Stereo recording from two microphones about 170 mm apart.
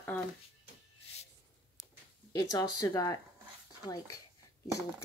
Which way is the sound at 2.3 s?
20° left (ahead or behind).